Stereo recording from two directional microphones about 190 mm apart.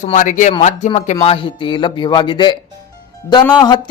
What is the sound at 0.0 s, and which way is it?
Speech, 40° left (ahead or behind).